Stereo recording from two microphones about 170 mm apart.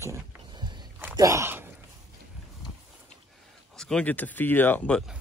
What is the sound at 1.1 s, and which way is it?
Speech, 20° right (ahead or behind).